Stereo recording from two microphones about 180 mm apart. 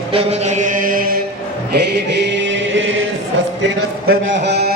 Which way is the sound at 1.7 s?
65° right (ahead or behind).